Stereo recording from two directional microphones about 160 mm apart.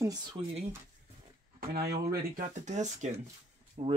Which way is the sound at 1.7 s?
75° right (ahead or behind).